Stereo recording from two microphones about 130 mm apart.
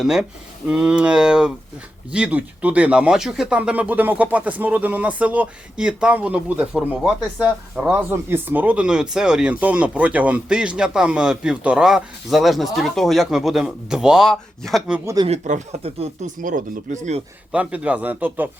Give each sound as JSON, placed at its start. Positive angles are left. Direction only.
{"t": 0.0, "sound": "speech", "side_deg": -5}
{"t": 15.0, "sound": "speech", "side_deg": -30}
{"t": 15.3, "sound": "speech", "side_deg": -60}
{"t": 16.2, "sound": "speech", "side_deg": -90}
{"t": 17.5, "sound": "speech", "side_deg": -10}